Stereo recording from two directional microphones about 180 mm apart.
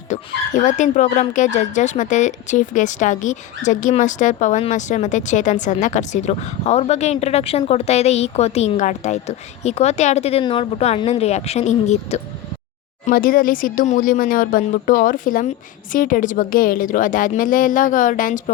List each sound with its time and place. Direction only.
0.1 s speech: 40° left (ahead or behind)
13.1 s speech: 50° left (ahead or behind)